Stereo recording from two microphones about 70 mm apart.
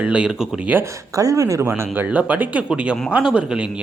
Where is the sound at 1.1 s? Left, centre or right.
Right.